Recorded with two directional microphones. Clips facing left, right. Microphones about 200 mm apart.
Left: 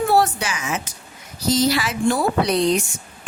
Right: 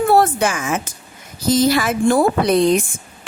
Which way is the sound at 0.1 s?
50° right (ahead or behind).